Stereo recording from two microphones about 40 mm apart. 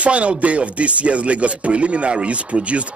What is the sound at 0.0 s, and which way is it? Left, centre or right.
Speech, right.